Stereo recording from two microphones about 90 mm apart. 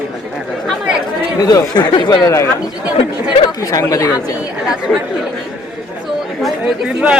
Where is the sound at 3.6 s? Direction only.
40° left (ahead or behind).